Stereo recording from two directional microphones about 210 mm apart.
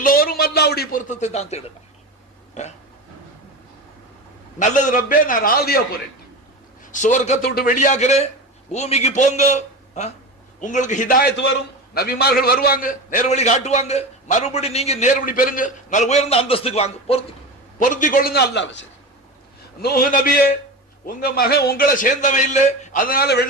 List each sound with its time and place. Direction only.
0.0 s a man's voice: 45° left (ahead or behind)
4.6 s a man's voice: 35° left (ahead or behind)
6.9 s a man's voice: 35° left (ahead or behind)
7.4 s a man's voice: 45° left (ahead or behind)
19.8 s a man's voice: 45° left (ahead or behind)